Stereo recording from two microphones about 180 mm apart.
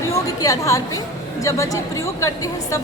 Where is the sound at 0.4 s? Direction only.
20° left (ahead or behind).